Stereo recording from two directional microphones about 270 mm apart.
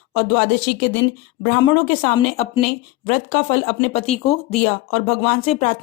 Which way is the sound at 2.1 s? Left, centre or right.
Left.